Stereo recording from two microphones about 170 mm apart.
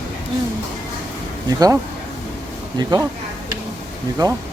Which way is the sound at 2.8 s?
20° right (ahead or behind).